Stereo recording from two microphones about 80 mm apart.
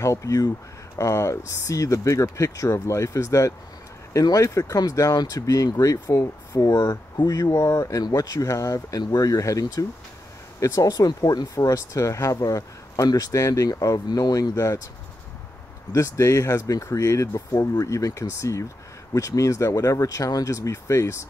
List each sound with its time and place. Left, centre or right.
0.0 s speech: left
14.5 s speech: left
15.9 s speech: left